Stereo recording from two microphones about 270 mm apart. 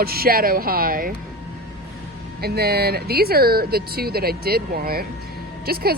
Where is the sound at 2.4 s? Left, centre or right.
Right.